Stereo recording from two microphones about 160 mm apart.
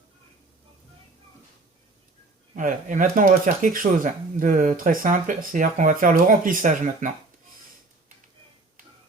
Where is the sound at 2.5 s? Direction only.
55° right (ahead or behind).